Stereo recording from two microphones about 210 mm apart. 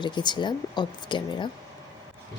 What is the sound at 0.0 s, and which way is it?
Speech, 20° left (ahead or behind).